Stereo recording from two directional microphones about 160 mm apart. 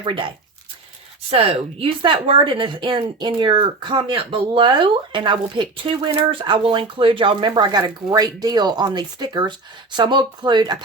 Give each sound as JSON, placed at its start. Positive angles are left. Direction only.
{"t": 0.0, "sound": "speech", "side_deg": -35}
{"t": 1.3, "sound": "speech", "side_deg": -35}